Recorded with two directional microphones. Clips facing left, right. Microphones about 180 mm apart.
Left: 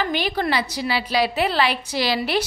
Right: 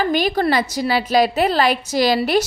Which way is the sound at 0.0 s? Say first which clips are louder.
Right 5 dB; 45° right (ahead or behind).